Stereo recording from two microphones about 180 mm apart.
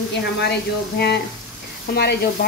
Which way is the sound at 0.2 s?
70° left (ahead or behind).